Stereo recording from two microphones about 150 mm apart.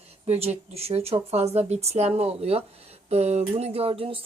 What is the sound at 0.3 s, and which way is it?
Speech, 45° right (ahead or behind).